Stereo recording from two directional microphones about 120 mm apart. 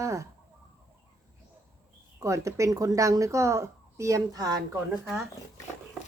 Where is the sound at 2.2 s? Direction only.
25° right (ahead or behind).